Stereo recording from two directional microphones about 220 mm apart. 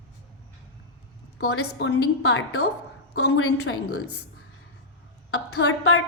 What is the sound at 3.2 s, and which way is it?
A woman's voice, 80° left.